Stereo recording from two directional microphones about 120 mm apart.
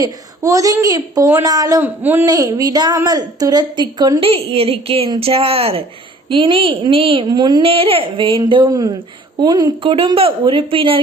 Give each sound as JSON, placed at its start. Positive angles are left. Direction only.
{"t": 0.0, "sound": "a woman's voice", "side_deg": -30}
{"t": 1.8, "sound": "a man's voice", "side_deg": -15}
{"t": 2.2, "sound": "a woman's voice", "side_deg": -30}
{"t": 4.2, "sound": "a woman's voice", "side_deg": -55}
{"t": 7.3, "sound": "a woman's voice", "side_deg": -35}
{"t": 7.6, "sound": "a woman's voice", "side_deg": -50}